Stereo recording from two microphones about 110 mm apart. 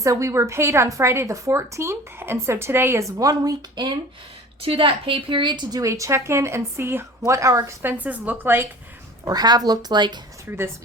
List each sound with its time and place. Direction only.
0.0 s a woman's voice: 30° right (ahead or behind)
4.6 s a woman's voice: 55° right (ahead or behind)
5.8 s a woman's voice: 30° right (ahead or behind)
9.2 s speech: 40° right (ahead or behind)
10.5 s a woman's voice: 20° right (ahead or behind)